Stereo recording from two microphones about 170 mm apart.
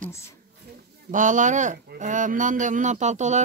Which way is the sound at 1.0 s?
50° right (ahead or behind).